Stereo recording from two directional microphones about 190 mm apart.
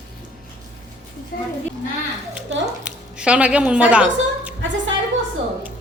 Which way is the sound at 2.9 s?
5° right (ahead or behind).